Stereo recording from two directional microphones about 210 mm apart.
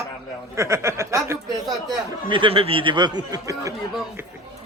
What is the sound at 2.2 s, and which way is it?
Speech, 25° right (ahead or behind).